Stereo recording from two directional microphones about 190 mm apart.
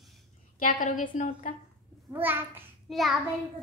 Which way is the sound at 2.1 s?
10° right (ahead or behind).